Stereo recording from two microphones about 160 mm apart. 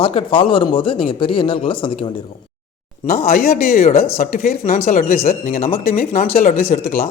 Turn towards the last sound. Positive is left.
turn(degrees=65)  # may be behind; listen again after turning